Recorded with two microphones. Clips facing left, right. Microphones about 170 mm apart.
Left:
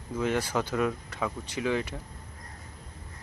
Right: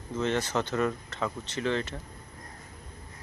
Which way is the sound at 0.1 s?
10° left (ahead or behind).